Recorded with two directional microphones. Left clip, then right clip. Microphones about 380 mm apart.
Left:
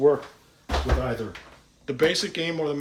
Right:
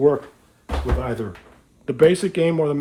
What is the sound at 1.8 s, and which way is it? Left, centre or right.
Speech, centre.